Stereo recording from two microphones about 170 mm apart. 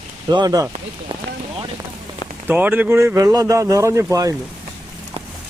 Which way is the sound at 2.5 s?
10° right (ahead or behind).